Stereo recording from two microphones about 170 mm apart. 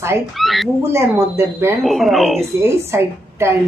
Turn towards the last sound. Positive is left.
turn(degrees=-15)  # may be behind; listen again after turning